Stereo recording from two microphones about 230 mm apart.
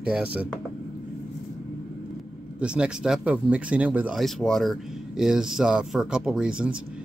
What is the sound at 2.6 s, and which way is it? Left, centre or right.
Speech, centre.